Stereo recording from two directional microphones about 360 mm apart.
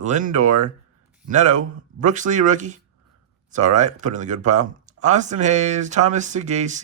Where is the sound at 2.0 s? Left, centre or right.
Right.